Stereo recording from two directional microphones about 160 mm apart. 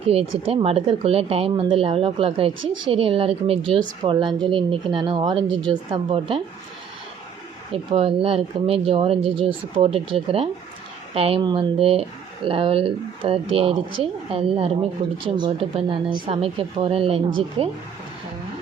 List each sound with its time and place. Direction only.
0.1 s speech: 35° right (ahead or behind)
7.7 s speech: 35° right (ahead or behind)